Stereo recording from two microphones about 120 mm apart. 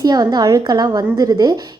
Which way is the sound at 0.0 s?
35° right (ahead or behind).